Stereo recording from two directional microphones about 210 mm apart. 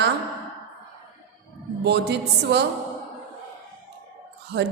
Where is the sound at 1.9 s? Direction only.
55° right (ahead or behind).